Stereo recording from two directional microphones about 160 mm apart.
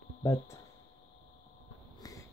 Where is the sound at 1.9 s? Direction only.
25° left (ahead or behind).